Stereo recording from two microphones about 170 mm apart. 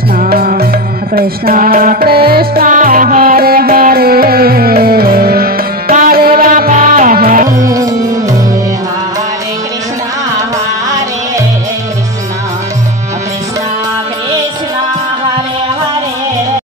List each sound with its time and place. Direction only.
0.2 s music: 60° right (ahead or behind)
7.4 s music: 20° right (ahead or behind)